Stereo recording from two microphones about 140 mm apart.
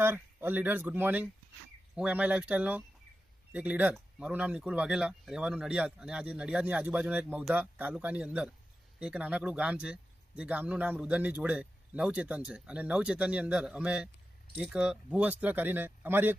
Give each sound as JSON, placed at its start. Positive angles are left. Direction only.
{"t": 0.0, "sound": "speech", "side_deg": -15}